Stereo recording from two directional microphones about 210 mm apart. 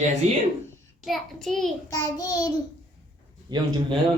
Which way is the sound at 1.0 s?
Centre (ahead or behind).